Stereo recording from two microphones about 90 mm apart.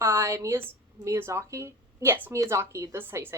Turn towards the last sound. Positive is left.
turn(degrees=-25)  # may be behind; listen again after turning